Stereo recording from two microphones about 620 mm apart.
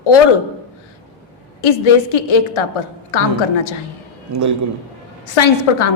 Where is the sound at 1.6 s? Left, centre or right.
Left.